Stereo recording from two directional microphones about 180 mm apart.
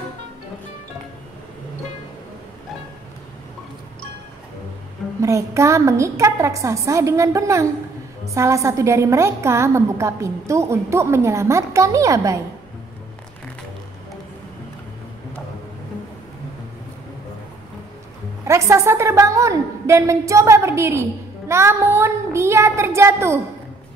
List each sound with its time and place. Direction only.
5.2 s a woman's voice: 15° right (ahead or behind)
18.5 s a woman's voice: 15° right (ahead or behind)